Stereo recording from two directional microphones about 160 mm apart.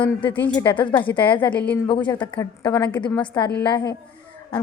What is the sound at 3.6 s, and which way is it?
Speech, 25° left (ahead or behind).